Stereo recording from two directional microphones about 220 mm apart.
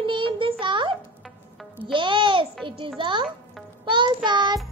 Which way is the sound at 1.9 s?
20° right (ahead or behind).